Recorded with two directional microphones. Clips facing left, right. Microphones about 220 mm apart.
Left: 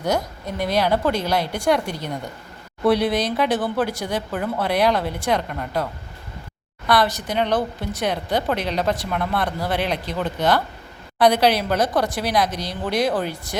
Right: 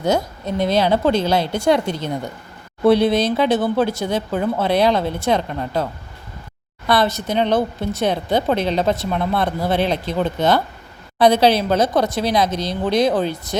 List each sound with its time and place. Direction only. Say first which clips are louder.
0.0 s speech: right 4 dB; 25° right (ahead or behind)